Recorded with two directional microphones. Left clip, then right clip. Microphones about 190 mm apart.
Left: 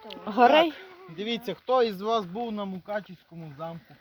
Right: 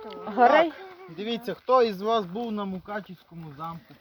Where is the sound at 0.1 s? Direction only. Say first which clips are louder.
Even; 35° left (ahead or behind).